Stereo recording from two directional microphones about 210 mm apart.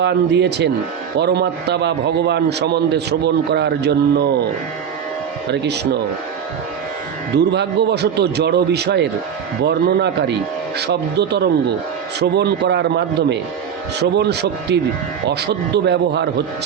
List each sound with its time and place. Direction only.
0.0 s a man's voice: 55° right (ahead or behind)
5.5 s a man's voice: 55° right (ahead or behind)
7.3 s a man's voice: 55° right (ahead or behind)